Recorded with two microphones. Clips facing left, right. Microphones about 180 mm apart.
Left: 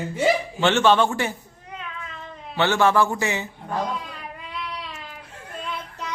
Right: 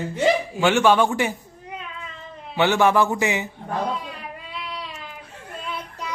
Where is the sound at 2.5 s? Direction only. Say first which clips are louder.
Right 1 dB; 15° right (ahead or behind).